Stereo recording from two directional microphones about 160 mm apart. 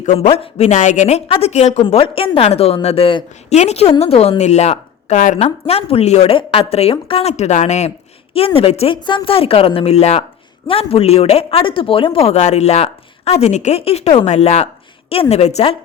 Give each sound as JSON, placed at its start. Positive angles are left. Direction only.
{"t": 0.0, "sound": "speech", "side_deg": 50}
{"t": 0.3, "sound": "a woman's voice", "side_deg": 40}
{"t": 3.5, "sound": "a woman's voice", "side_deg": 45}